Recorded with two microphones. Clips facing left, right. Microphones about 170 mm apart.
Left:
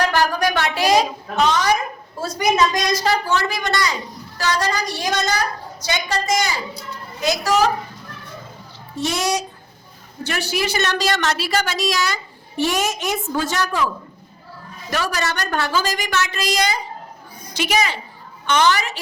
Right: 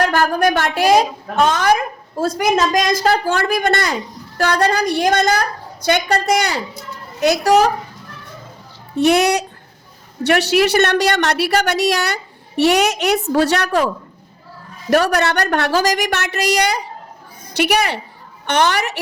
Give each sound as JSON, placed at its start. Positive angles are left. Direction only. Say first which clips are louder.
{"t": 0.1, "sound": "a woman's voice", "louder": "right 3 dB", "side_deg": -50}
{"t": 9.0, "sound": "a woman's voice", "louder": "right 8 dB", "side_deg": -60}